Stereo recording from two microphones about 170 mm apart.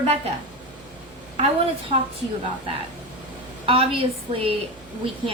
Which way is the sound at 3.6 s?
35° right (ahead or behind).